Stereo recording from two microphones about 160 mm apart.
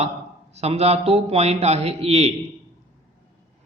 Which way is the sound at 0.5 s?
40° right (ahead or behind).